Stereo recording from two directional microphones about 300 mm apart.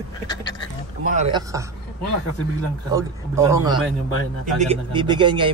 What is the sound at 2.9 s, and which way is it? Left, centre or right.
Speech, centre.